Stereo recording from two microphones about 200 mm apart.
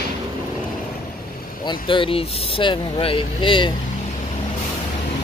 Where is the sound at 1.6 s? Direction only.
25° left (ahead or behind).